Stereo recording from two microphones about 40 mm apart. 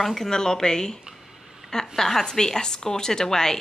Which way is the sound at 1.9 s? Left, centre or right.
Centre.